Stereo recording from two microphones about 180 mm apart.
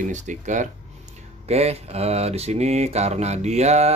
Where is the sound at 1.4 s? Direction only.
35° right (ahead or behind).